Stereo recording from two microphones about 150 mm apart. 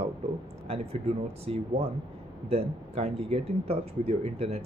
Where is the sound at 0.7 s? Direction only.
45° right (ahead or behind).